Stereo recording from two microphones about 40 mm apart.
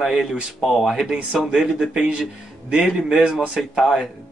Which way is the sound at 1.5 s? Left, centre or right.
Centre.